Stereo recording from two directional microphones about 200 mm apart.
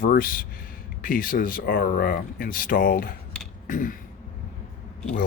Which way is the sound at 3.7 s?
45° left (ahead or behind).